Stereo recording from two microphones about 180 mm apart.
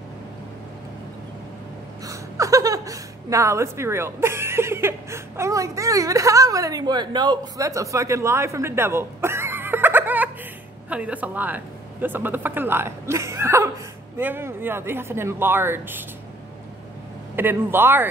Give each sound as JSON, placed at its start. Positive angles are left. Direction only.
{"t": 2.0, "sound": "a woman's voice", "side_deg": -20}
{"t": 17.4, "sound": "speech", "side_deg": -10}